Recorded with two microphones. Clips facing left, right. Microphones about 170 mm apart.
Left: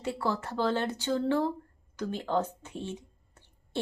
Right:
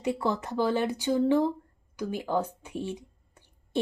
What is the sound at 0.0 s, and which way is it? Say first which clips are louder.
Speech: right 3 dB; 15° right (ahead or behind).